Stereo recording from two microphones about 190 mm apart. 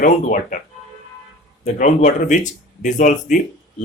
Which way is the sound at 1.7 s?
40° left (ahead or behind).